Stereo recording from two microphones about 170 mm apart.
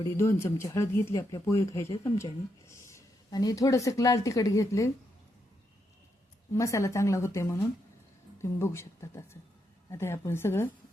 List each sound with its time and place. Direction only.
0.0 s speech: 15° left (ahead or behind)
6.5 s speech: 15° left (ahead or behind)